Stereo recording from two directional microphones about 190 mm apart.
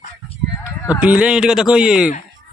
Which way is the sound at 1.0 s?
5° right (ahead or behind).